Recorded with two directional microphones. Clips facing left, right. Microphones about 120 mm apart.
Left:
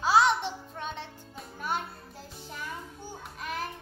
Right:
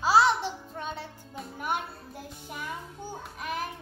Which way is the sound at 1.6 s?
15° right (ahead or behind).